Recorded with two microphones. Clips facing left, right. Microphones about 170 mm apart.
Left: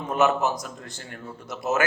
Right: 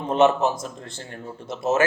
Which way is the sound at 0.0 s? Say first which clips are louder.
Right 4 dB; 30° right (ahead or behind).